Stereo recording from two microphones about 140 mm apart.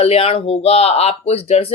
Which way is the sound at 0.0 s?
45° left (ahead or behind).